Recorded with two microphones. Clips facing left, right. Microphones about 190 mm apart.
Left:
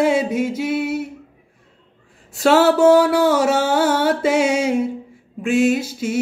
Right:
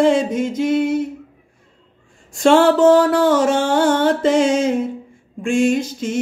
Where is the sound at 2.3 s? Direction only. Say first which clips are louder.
Right 2 dB; 5° left (ahead or behind).